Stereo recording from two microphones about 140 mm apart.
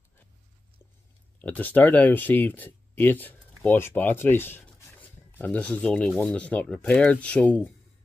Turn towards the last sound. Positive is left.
turn(degrees=10)  # may be behind; listen again after turning